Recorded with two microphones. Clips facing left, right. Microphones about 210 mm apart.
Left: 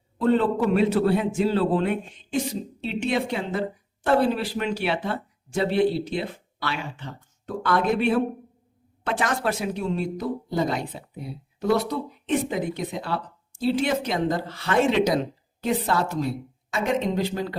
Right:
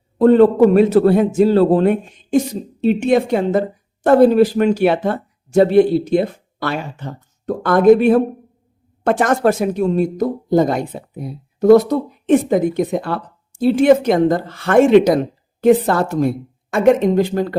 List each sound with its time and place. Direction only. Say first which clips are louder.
0.2 s speech: right 11 dB; 45° right (ahead or behind)